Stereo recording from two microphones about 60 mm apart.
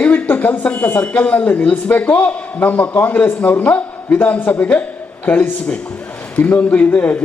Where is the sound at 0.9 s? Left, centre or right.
Left.